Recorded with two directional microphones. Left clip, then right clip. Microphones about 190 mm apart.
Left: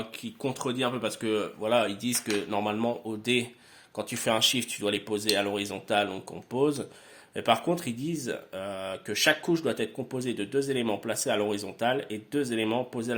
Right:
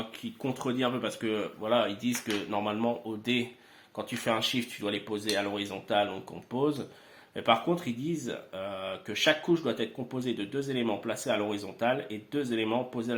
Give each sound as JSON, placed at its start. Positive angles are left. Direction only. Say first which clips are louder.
{"t": 0.2, "sound": "speech", "louder": "left 3 dB", "side_deg": 40}